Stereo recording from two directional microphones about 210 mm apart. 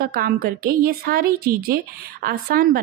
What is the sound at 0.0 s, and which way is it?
A woman's voice, 45° right (ahead or behind).